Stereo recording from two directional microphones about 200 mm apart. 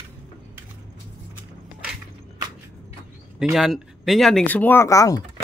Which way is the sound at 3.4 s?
Centre (ahead or behind).